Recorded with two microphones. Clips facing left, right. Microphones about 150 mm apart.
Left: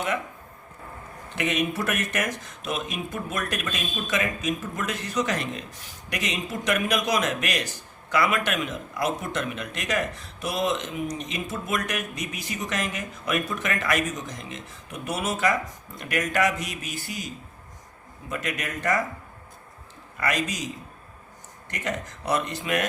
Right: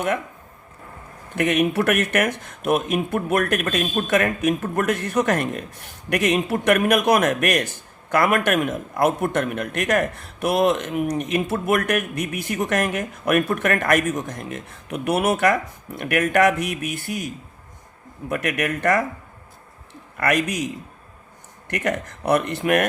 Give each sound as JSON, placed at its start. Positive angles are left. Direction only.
{"t": 1.4, "sound": "speech", "side_deg": -60}
{"t": 20.1, "sound": "speech", "side_deg": -60}
{"t": 21.7, "sound": "speech", "side_deg": -60}